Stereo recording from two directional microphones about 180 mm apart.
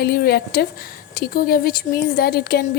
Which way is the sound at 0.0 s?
60° left (ahead or behind).